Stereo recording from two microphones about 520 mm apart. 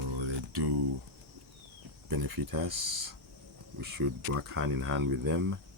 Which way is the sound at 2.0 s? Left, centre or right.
Right.